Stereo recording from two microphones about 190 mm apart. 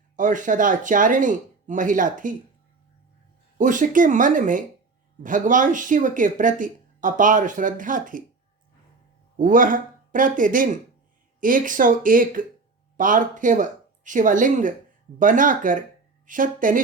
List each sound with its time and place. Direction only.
0.2 s speech: 45° right (ahead or behind)
3.6 s speech: 45° right (ahead or behind)
9.4 s speech: 45° right (ahead or behind)